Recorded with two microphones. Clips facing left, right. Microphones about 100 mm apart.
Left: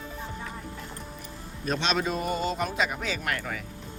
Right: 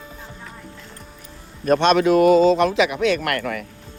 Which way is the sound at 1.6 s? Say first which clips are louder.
Right 12 dB; 55° right (ahead or behind).